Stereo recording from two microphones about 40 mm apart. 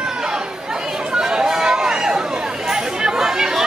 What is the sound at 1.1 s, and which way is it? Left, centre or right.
Chatter, right.